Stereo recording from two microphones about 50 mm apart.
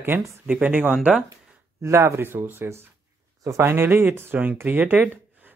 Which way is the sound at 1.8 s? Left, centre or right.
Right.